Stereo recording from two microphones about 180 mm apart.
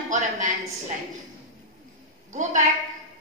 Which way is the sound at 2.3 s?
45° right (ahead or behind).